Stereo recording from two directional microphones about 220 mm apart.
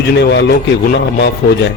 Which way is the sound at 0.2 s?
50° left (ahead or behind).